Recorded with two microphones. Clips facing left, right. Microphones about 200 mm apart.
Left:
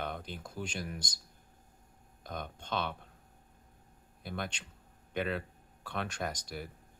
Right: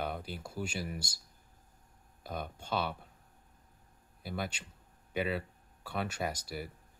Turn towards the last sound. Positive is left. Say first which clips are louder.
# right 1 dB
turn(degrees=-5)  # may be behind; listen again after turning